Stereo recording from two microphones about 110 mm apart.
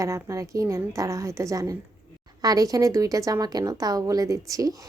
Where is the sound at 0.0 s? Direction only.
30° right (ahead or behind).